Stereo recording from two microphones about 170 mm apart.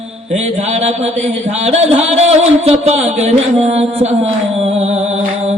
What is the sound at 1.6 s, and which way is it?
Speech, 40° right (ahead or behind).